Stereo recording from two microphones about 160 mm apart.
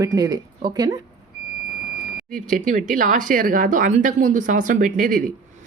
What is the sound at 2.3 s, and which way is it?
Speech, 60° right (ahead or behind).